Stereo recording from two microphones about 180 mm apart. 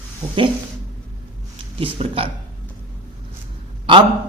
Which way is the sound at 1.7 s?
30° right (ahead or behind).